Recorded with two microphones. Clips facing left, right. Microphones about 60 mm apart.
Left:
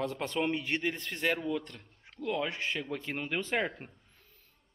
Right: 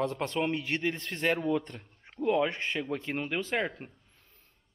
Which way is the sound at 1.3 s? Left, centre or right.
Centre.